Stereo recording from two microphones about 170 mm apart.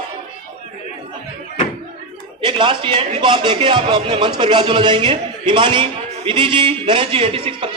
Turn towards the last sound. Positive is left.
turn(degrees=-30)  # may be behind; listen again after turning